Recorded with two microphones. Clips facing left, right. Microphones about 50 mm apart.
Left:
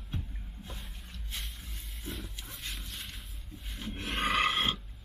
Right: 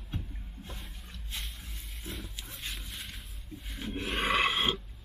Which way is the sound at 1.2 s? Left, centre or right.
Centre.